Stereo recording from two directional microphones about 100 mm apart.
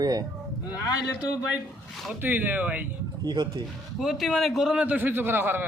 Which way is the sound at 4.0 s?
5° right (ahead or behind).